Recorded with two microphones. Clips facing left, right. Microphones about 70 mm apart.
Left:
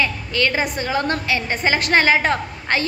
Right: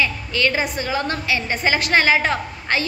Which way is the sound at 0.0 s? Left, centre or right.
Left.